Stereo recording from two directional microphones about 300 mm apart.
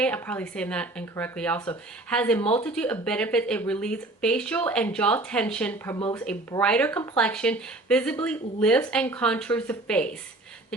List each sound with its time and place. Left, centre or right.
0.0 s speech: centre
2.4 s speech: centre
2.6 s speech: centre